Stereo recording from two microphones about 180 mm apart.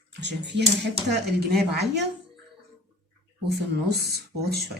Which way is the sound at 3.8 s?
65° right (ahead or behind).